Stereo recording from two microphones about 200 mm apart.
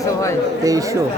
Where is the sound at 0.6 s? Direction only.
15° right (ahead or behind).